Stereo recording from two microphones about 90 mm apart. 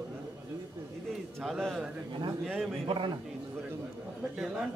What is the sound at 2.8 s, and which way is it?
Speech, 70° right (ahead or behind).